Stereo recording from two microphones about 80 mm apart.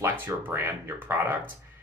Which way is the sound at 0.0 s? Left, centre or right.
Right.